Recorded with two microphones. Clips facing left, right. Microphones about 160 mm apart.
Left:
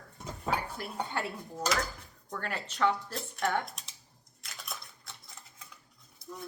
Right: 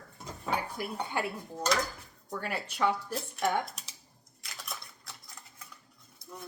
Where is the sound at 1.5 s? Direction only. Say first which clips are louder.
Right 2 dB; 5° left (ahead or behind).